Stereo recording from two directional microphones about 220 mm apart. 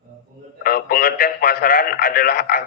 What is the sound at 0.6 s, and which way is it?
A man's voice, 40° left (ahead or behind).